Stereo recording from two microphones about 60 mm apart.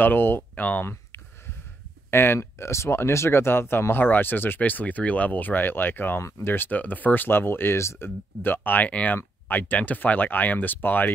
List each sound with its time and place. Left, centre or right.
0.0 s speech: left
2.0 s speech: left